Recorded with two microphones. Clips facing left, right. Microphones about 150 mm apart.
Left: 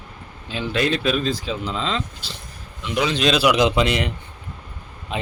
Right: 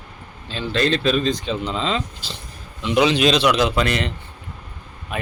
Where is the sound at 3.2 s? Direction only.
5° left (ahead or behind).